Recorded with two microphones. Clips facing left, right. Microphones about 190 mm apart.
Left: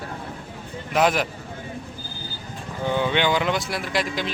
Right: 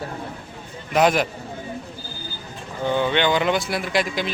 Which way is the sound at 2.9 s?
10° left (ahead or behind).